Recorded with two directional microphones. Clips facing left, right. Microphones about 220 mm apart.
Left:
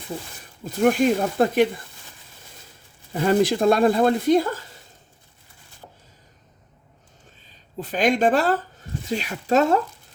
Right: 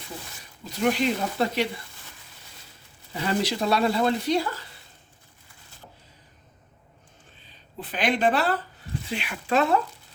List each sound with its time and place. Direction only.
0.6 s speech: 50° left (ahead or behind)
3.1 s speech: 45° left (ahead or behind)
7.4 s speech: 45° left (ahead or behind)